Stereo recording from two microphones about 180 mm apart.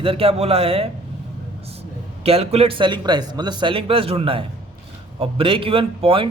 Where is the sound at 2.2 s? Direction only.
35° right (ahead or behind).